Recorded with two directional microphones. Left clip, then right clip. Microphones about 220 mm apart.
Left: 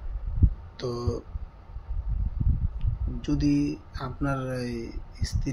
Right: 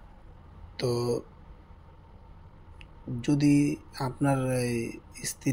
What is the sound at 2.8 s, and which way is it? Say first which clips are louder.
Speech: right 1 dB; 30° right (ahead or behind).